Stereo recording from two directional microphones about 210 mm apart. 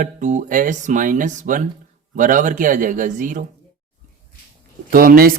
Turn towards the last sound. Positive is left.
turn(degrees=-45)  # may be behind; listen again after turning